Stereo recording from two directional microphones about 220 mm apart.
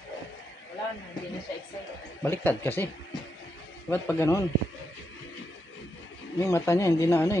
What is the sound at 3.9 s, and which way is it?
Speech, 10° left (ahead or behind).